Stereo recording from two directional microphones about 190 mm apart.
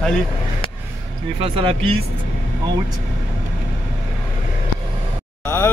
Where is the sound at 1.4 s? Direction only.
30° right (ahead or behind).